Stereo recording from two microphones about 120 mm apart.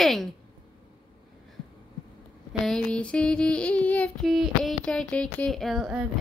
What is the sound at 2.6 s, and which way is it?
Child singing, 5° left (ahead or behind).